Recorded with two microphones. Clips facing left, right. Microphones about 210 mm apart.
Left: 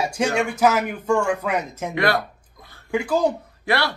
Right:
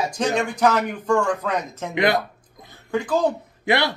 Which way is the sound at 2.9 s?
10° left (ahead or behind).